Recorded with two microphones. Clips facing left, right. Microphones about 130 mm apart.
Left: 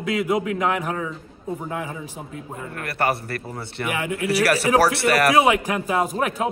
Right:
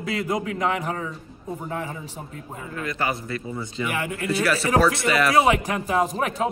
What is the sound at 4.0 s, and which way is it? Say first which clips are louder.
Speech: left 3 dB; 15° left (ahead or behind).